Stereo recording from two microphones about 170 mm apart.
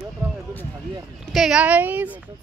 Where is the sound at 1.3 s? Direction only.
Centre (ahead or behind).